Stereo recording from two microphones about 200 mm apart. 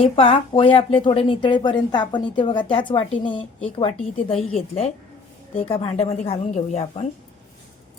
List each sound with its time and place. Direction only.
0.0 s a woman's voice: 30° left (ahead or behind)